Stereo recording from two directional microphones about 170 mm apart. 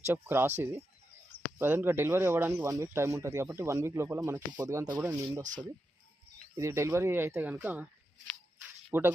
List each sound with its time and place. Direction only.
0.1 s speech: 10° right (ahead or behind)
6.6 s speech: 15° right (ahead or behind)
8.9 s speech: 10° right (ahead or behind)